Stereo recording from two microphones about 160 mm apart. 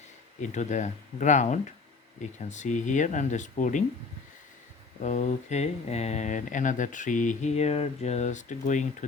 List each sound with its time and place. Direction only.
0.4 s speech: 50° left (ahead or behind)
4.9 s speech: 50° left (ahead or behind)